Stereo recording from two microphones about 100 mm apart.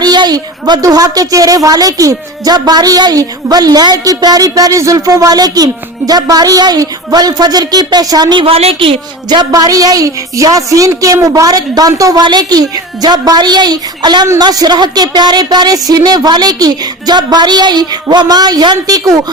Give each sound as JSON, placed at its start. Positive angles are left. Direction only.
{"t": 0.0, "sound": "a woman's voice", "side_deg": -45}
{"t": 8.4, "sound": "a woman's voice", "side_deg": -75}
{"t": 9.3, "sound": "a woman's voice", "side_deg": -40}